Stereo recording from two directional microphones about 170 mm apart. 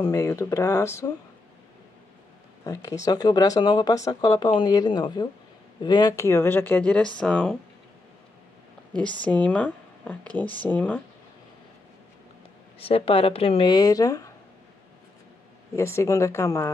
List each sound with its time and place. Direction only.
0.0 s speech: 15° left (ahead or behind)
2.6 s speech: 20° left (ahead or behind)
9.2 s speech: 10° left (ahead or behind)
12.7 s speech: 35° left (ahead or behind)
15.7 s speech: 15° left (ahead or behind)